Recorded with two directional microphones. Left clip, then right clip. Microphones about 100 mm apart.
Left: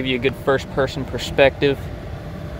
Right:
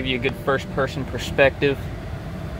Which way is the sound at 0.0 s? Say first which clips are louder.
Left 3 dB; 60° left (ahead or behind).